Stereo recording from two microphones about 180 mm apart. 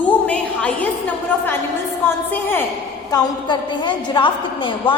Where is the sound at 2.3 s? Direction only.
10° left (ahead or behind).